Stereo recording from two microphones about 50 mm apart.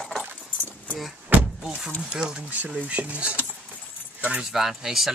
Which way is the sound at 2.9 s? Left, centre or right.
Right.